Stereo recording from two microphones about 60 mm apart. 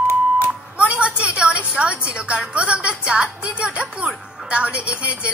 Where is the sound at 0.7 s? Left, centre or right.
Right.